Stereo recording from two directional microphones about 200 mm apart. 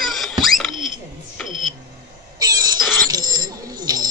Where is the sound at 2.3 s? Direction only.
20° right (ahead or behind).